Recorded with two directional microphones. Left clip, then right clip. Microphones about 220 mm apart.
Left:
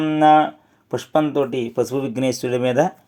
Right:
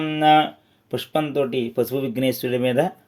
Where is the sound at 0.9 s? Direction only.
10° left (ahead or behind).